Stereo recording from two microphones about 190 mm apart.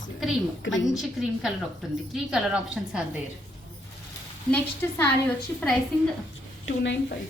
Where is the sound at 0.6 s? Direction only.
85° left.